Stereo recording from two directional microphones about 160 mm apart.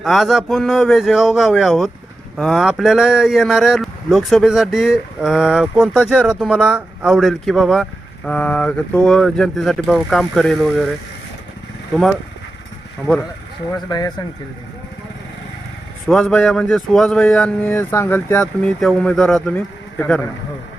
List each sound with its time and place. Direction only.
0.0 s speech: centre (ahead or behind)
13.7 s speech: 25° left (ahead or behind)
16.0 s speech: centre (ahead or behind)